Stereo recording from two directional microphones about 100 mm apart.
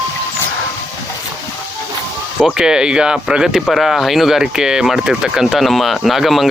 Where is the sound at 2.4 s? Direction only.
5° right (ahead or behind).